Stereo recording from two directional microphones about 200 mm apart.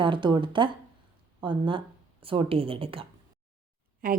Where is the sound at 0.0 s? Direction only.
25° right (ahead or behind).